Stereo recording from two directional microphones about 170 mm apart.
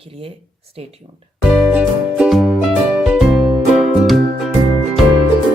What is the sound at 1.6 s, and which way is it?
Music, 5° right (ahead or behind).